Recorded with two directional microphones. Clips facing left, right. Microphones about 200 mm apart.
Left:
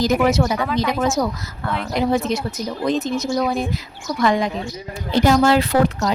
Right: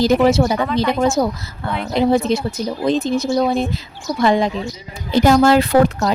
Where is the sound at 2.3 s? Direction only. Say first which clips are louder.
Right 4 dB; 30° right (ahead or behind).